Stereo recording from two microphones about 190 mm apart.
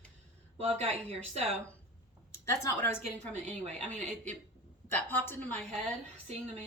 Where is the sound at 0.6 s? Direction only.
30° right (ahead or behind).